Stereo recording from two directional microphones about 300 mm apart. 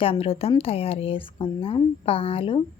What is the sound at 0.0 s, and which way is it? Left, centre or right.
Speech, centre.